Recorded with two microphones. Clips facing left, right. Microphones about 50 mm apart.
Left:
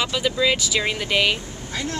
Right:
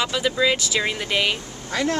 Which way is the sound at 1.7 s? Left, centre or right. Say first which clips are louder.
Right 6 dB; right.